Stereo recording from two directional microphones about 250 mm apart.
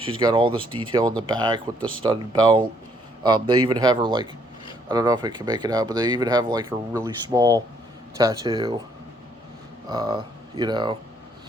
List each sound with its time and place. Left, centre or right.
0.0 s speech: centre
3.7 s speech: centre
9.9 s speech: centre